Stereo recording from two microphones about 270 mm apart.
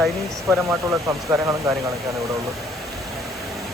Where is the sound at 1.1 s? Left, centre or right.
Centre.